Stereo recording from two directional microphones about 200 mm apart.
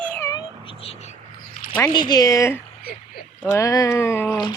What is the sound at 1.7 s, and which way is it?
Speech, 20° left (ahead or behind).